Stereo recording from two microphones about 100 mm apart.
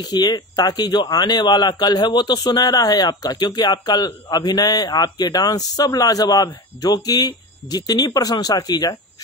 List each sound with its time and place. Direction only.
0.1 s speech: 45° left (ahead or behind)